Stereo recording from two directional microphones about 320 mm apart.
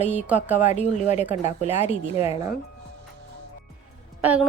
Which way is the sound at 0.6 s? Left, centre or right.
Left.